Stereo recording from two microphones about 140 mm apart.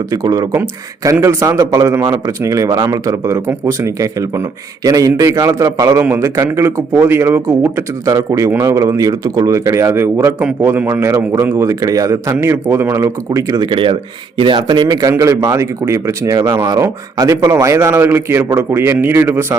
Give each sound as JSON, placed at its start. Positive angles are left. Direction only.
{"t": 0.1, "sound": "a man's voice", "side_deg": -25}